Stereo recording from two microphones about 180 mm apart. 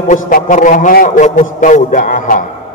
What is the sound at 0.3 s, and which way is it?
A man's voice, 45° left (ahead or behind).